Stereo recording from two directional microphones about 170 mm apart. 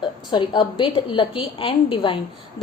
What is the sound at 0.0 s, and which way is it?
A woman's voice, 30° left (ahead or behind).